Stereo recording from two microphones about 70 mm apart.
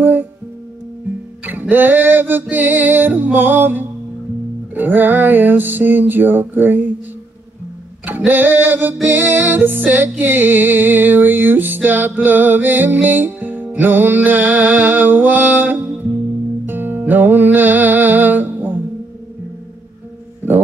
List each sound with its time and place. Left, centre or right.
0.0 s music: right
1.4 s music: right
8.3 s music: right